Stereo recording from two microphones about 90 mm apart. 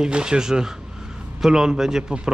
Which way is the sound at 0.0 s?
10° right (ahead or behind).